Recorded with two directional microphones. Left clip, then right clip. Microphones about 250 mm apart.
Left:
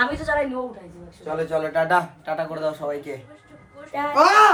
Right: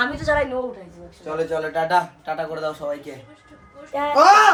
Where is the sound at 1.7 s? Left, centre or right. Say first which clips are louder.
Even; centre.